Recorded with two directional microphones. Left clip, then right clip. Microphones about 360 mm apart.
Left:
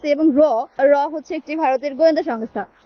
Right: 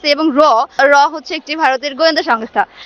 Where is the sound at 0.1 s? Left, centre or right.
Right.